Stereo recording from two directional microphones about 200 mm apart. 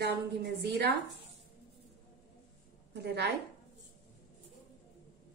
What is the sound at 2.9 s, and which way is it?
Speech, 55° right (ahead or behind).